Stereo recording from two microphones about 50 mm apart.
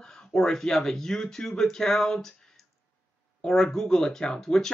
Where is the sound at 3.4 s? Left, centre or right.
Centre.